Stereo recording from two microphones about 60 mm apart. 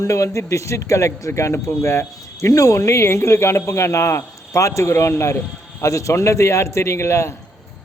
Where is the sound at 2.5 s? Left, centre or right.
Left.